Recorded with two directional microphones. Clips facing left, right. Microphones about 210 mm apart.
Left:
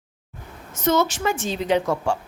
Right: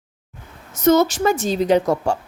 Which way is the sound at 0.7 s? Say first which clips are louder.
Right 6 dB; 40° right (ahead or behind).